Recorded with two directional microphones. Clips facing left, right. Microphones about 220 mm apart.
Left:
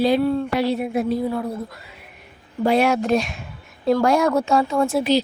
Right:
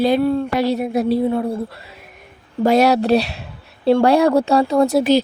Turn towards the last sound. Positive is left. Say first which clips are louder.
# right 5 dB
turn(degrees=-45)  # may be behind; listen again after turning